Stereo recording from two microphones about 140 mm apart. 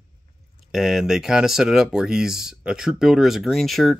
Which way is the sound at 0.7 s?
Centre (ahead or behind).